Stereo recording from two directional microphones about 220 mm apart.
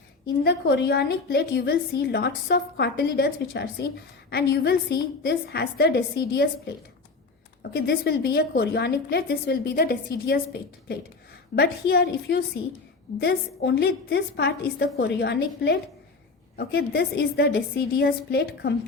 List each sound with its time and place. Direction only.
0.4 s a woman's voice: 50° left (ahead or behind)